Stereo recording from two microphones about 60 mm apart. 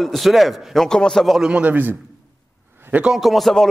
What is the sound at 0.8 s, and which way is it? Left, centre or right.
Speech, centre.